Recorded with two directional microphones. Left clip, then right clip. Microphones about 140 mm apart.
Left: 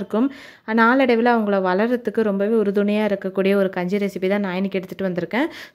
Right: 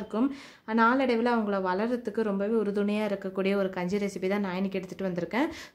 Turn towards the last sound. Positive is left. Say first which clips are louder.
# left 7 dB
turn(degrees=40)  # may be behind; listen again after turning